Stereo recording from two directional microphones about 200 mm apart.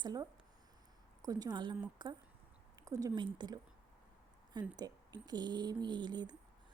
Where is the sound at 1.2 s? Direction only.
20° right (ahead or behind).